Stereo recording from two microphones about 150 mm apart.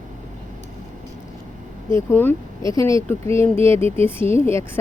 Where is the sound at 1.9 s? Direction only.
15° left (ahead or behind).